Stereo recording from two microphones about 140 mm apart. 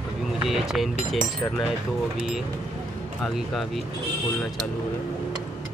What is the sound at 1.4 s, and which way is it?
Speech, 15° left (ahead or behind).